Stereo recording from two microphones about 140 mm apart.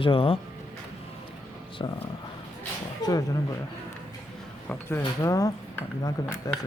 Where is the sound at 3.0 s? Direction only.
25° left (ahead or behind).